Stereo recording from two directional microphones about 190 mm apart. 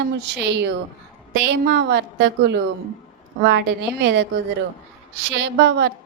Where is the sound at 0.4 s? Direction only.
65° right (ahead or behind).